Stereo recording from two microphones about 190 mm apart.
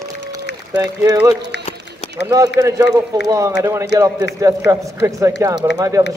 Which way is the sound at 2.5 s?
15° right (ahead or behind).